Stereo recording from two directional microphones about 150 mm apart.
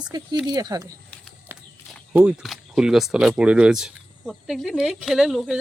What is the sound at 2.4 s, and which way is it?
Speech, centre (ahead or behind).